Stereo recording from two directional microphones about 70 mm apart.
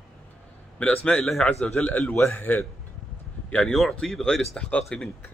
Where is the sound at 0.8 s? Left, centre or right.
Centre.